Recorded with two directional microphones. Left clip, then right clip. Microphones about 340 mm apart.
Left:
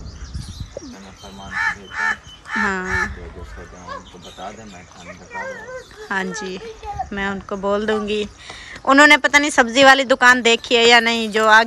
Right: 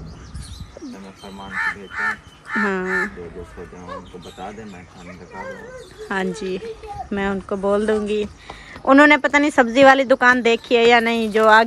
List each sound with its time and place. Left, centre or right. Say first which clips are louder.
1.5 s speech: left 2 dB; left
2.6 s speech: left 1 dB; centre
6.0 s speech: even; centre